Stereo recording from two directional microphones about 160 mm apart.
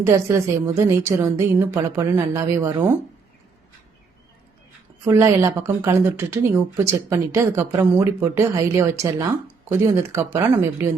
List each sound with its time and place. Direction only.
0.0 s speech: 20° right (ahead or behind)
5.0 s speech: 15° right (ahead or behind)